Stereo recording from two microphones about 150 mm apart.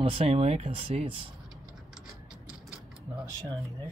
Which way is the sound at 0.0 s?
40° right (ahead or behind).